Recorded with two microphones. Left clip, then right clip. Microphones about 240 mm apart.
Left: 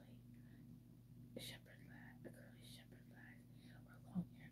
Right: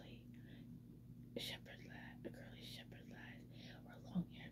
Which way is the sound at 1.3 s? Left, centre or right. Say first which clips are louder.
Right 6 dB; right.